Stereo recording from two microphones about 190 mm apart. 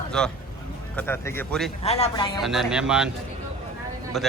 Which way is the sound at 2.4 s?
Centre (ahead or behind).